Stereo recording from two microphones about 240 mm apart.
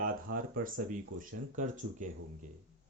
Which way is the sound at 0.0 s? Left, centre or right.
Right.